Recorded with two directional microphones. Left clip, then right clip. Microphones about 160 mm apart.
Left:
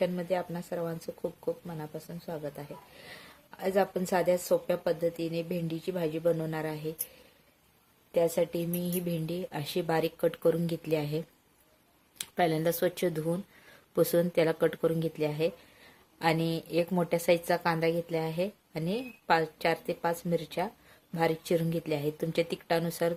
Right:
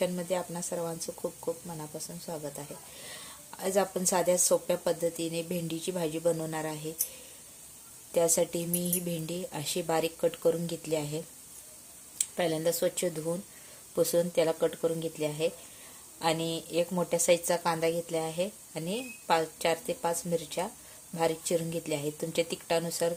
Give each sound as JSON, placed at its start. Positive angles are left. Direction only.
{"t": 0.0, "sound": "speech", "side_deg": 0}
{"t": 8.1, "sound": "a woman's voice", "side_deg": 0}